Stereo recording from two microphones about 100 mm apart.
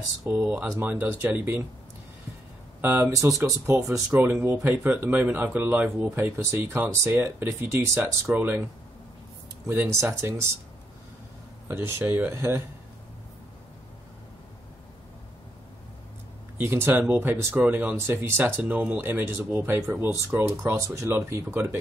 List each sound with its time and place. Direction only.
0.3 s speech: 15° right (ahead or behind)
2.8 s speech: 20° right (ahead or behind)
4.1 s speech: 20° right (ahead or behind)
9.7 s speech: 20° right (ahead or behind)
11.6 s speech: 25° right (ahead or behind)
16.5 s speech: 20° right (ahead or behind)